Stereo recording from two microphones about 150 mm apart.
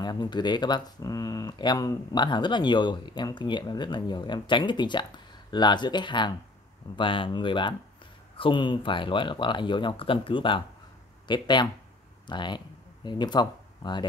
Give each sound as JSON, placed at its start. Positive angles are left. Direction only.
{"t": 0.0, "sound": "speech", "side_deg": 30}